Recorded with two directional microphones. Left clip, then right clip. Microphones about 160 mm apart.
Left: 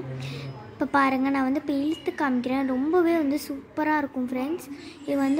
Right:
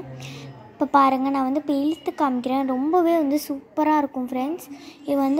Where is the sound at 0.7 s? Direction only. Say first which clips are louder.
Right 5 dB; 20° right (ahead or behind).